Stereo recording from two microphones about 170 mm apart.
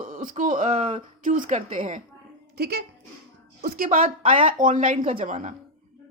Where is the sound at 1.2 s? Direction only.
50° right (ahead or behind).